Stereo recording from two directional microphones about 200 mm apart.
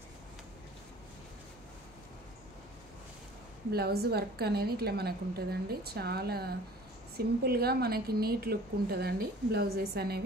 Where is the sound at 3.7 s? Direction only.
50° right (ahead or behind).